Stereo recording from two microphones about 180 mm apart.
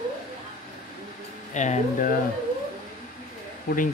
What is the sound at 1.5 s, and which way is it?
Speech, 40° left (ahead or behind).